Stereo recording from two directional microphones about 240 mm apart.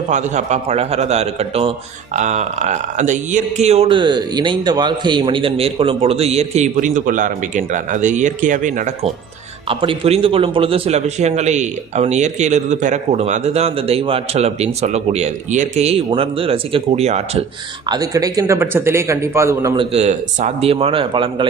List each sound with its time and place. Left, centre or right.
0.1 s a man's voice: right
9.6 s a man's voice: right
17.8 s speech: centre